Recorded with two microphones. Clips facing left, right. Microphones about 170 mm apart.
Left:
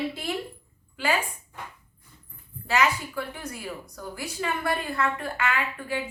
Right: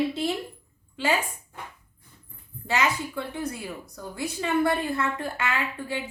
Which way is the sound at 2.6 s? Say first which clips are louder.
Left 1 dB; 20° right (ahead or behind).